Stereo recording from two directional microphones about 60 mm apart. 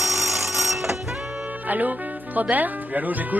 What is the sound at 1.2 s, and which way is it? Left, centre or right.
Music, centre.